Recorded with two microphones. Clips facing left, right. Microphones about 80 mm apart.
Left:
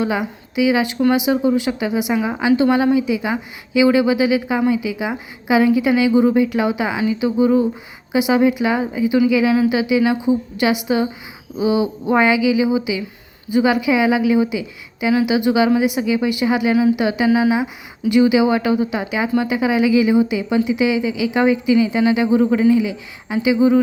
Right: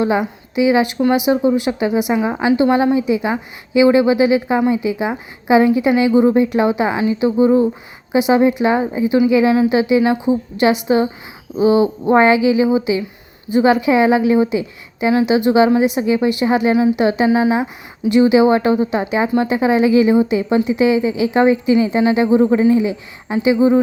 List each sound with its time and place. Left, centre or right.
0.0 s a woman's voice: right